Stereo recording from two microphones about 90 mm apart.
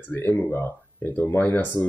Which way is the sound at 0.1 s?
25° left (ahead or behind).